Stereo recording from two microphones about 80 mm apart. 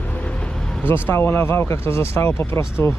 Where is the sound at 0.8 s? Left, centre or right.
Left.